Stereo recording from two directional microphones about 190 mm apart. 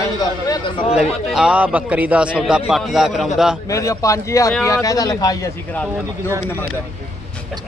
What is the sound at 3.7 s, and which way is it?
Speech, 15° left (ahead or behind).